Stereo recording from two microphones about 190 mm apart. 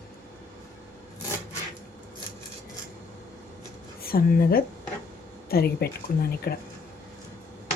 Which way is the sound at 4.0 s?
50° left (ahead or behind).